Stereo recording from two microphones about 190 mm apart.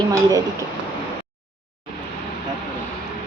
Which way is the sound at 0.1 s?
20° right (ahead or behind).